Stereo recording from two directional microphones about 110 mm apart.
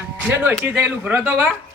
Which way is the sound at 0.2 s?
15° right (ahead or behind).